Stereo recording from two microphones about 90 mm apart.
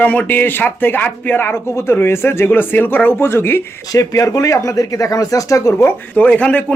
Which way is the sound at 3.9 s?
35° left (ahead or behind).